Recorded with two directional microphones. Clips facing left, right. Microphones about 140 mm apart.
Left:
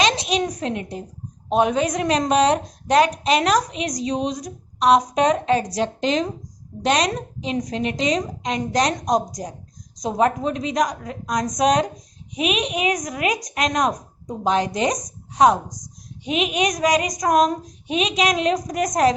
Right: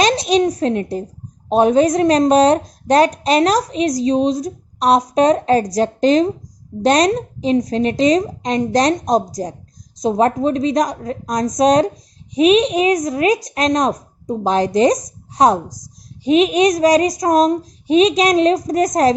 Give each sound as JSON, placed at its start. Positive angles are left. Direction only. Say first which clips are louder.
{"t": 0.0, "sound": "a woman's voice", "louder": "right 6 dB", "side_deg": -35}
{"t": 16.2, "sound": "speech", "louder": "right 9 dB", "side_deg": -35}